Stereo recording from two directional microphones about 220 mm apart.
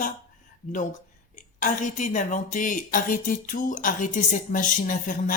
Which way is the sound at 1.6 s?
35° left (ahead or behind).